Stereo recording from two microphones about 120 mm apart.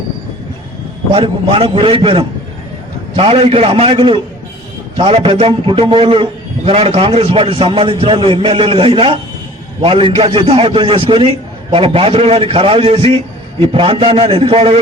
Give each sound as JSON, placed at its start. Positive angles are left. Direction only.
{"t": 1.1, "sound": "a man's voice", "side_deg": -50}